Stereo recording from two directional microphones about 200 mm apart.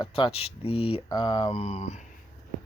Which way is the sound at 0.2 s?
30° left (ahead or behind).